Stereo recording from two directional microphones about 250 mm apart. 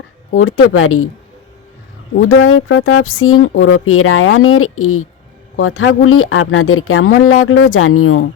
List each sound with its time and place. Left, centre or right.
0.3 s speech: left
2.3 s speech: left